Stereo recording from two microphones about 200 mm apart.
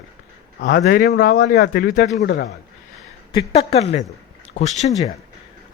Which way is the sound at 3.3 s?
30° left (ahead or behind).